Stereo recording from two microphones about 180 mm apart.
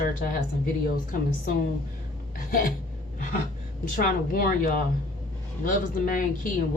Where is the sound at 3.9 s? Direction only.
55° left (ahead or behind).